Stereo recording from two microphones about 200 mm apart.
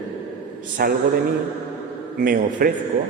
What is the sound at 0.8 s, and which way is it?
Speech, 50° right (ahead or behind).